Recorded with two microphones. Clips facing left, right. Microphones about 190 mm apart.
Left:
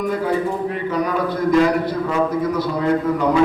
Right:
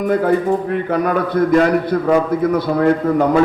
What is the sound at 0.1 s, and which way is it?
A man's voice, 55° right (ahead or behind).